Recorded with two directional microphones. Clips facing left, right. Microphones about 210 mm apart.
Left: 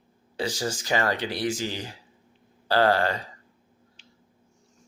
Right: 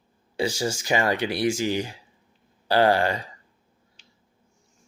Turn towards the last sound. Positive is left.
turn(degrees=-15)  # may be behind; listen again after turning